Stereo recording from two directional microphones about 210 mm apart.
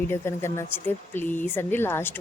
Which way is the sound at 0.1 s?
10° left (ahead or behind).